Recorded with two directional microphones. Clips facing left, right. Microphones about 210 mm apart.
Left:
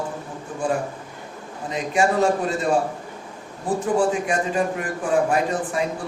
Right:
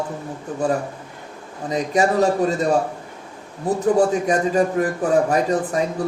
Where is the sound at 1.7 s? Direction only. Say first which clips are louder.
Right 3 dB; 40° right (ahead or behind).